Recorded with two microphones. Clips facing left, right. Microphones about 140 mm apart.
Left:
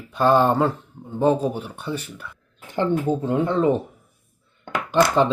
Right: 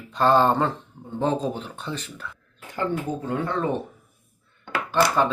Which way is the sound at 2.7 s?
25° left (ahead or behind).